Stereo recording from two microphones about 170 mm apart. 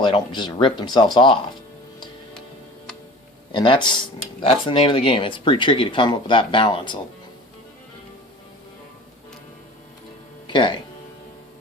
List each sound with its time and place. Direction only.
0.0 s speech: 25° left (ahead or behind)
3.5 s speech: 30° left (ahead or behind)
10.4 s speech: 30° left (ahead or behind)